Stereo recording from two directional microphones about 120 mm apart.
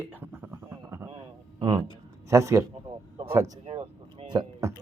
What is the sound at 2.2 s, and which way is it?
A man's voice, 25° right (ahead or behind).